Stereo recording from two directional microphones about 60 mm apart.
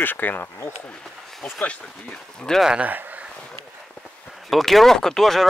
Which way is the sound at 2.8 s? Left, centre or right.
Right.